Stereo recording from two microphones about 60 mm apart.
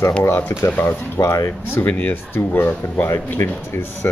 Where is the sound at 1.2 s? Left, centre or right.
Left.